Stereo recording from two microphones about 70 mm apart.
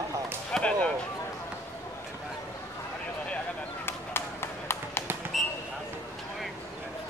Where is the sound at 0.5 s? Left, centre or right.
Centre.